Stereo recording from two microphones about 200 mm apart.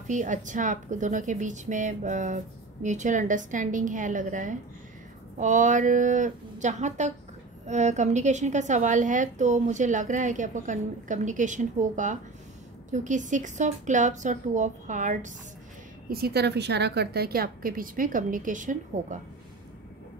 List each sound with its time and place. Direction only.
0.1 s a woman's voice: 40° right (ahead or behind)
16.1 s a woman's voice: 50° right (ahead or behind)